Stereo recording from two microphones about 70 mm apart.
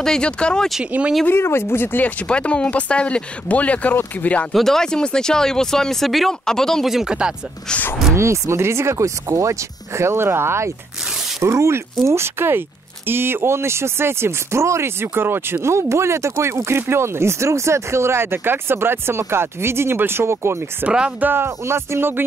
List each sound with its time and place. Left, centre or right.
0.0 s speech: centre
1.2 s speech: left
2.2 s speech: centre
4.5 s speech: centre
6.9 s speech: centre
8.2 s speech: right
20.8 s speech: centre
21.2 s speech: right